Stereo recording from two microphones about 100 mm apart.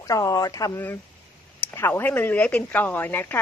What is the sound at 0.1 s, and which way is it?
Speech, 35° left (ahead or behind).